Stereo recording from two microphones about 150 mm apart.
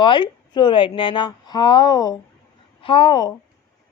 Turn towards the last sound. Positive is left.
turn(degrees=30)  # may be behind; listen again after turning